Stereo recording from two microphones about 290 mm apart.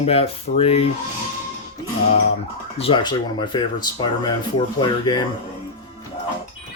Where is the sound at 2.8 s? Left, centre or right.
Centre.